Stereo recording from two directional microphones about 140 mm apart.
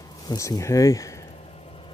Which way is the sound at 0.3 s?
25° left (ahead or behind).